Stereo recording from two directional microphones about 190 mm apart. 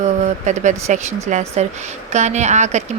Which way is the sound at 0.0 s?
40° right (ahead or behind).